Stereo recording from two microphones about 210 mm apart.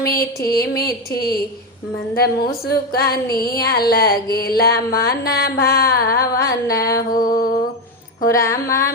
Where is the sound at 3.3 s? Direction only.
45° left (ahead or behind).